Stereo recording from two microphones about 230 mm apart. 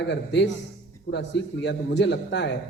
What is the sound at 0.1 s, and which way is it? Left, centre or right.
A man's voice, left.